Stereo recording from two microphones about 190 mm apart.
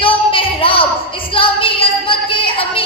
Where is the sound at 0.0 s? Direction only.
30° left (ahead or behind).